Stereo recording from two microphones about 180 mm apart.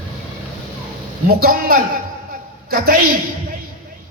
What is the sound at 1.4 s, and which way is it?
Speech, 50° right (ahead or behind).